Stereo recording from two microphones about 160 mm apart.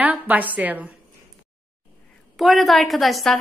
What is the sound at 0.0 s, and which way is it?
Speech, 10° right (ahead or behind).